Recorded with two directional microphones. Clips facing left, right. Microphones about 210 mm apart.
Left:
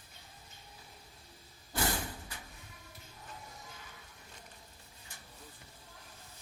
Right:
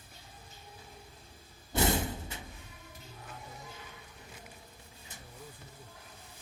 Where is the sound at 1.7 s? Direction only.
25° right (ahead or behind).